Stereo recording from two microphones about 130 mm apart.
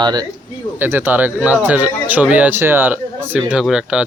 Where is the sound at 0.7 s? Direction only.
15° right (ahead or behind).